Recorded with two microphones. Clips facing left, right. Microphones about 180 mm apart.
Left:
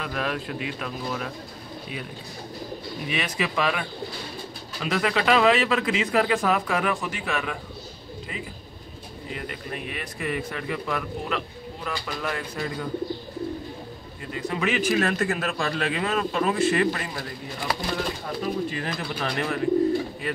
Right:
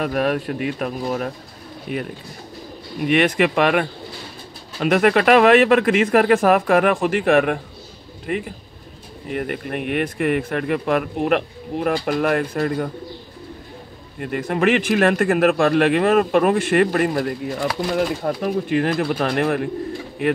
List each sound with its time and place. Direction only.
0.0 s speech: 55° right (ahead or behind)
3.1 s speech: 60° right (ahead or behind)
14.2 s speech: 60° right (ahead or behind)